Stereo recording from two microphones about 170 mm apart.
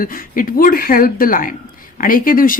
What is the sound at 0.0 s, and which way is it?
Speech, 55° left (ahead or behind).